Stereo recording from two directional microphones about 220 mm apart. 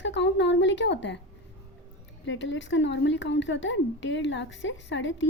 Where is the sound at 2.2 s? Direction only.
55° left (ahead or behind).